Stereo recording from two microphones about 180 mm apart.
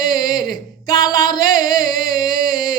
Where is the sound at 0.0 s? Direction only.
20° left (ahead or behind).